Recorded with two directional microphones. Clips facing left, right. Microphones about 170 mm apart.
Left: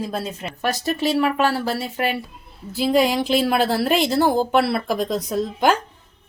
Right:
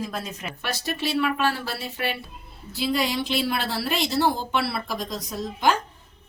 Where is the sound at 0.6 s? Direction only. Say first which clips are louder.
Left 7 dB; 45° left (ahead or behind).